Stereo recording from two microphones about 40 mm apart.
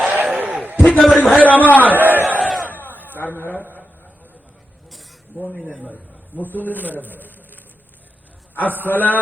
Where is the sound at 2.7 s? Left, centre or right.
Left.